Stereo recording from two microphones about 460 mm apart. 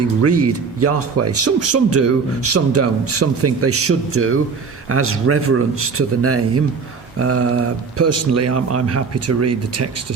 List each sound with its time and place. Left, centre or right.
0.2 s speech: right